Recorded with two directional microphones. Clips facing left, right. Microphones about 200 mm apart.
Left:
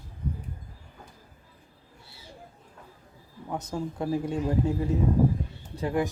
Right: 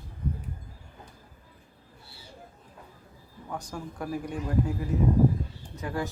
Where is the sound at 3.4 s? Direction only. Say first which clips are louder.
Left 5 dB; 20° left (ahead or behind).